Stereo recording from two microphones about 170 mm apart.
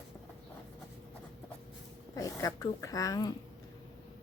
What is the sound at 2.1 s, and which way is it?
Speech, 20° left (ahead or behind).